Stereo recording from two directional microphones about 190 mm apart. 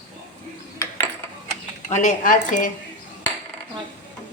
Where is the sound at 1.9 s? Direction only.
40° left (ahead or behind).